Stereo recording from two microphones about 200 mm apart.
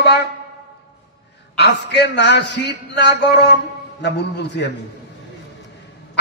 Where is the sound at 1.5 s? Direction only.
55° left (ahead or behind).